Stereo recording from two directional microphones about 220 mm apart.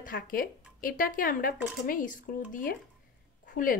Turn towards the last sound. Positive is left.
turn(degrees=40)  # may be behind; listen again after turning